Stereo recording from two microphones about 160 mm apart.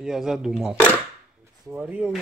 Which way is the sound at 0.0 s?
Centre (ahead or behind).